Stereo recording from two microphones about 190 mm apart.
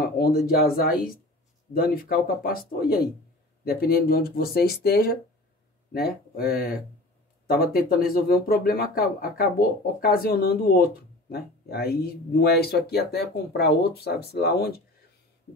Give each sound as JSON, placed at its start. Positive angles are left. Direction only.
{"t": 0.0, "sound": "speech", "side_deg": 50}